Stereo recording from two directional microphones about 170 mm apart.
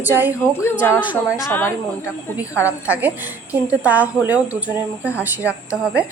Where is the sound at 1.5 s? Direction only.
15° left (ahead or behind).